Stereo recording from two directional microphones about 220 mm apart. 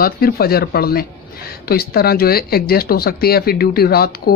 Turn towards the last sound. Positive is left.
turn(degrees=45)  # may be behind; listen again after turning